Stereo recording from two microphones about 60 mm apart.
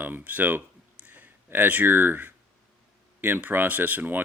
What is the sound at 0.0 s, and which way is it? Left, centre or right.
Speech, right.